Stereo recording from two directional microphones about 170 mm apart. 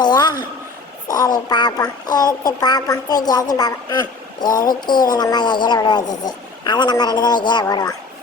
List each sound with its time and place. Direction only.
0.0 s a woman's voice: 25° left (ahead or behind)
4.4 s a sound: 25° left (ahead or behind)
5.1 s a child's voice: 25° left (ahead or behind)